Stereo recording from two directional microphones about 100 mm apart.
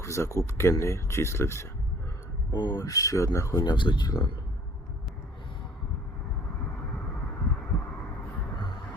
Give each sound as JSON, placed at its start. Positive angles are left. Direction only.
{"t": 0.0, "sound": "speech", "side_deg": 30}
{"t": 2.5, "sound": "speech", "side_deg": 50}
{"t": 2.8, "sound": "speech", "side_deg": 35}
{"t": 3.6, "sound": "speech", "side_deg": 50}